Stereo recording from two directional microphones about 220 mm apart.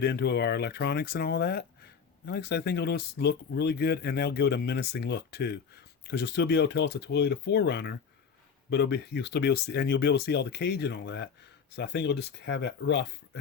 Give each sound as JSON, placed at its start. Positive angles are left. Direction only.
{"t": 0.0, "sound": "speech", "side_deg": 50}